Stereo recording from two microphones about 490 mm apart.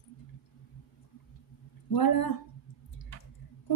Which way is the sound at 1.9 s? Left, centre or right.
Left.